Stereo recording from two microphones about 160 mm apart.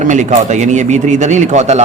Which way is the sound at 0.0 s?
50° right (ahead or behind).